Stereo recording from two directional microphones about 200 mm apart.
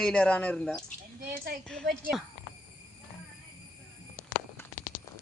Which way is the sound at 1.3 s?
50° right (ahead or behind).